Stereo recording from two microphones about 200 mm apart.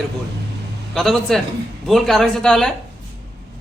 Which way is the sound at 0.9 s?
Centre (ahead or behind).